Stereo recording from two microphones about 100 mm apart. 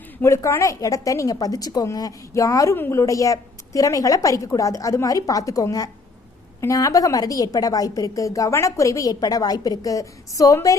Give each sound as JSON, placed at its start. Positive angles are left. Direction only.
{"t": 0.2, "sound": "a woman's voice", "side_deg": 25}
{"t": 2.7, "sound": "a woman's voice", "side_deg": 20}
{"t": 3.0, "sound": "a woman's voice", "side_deg": 35}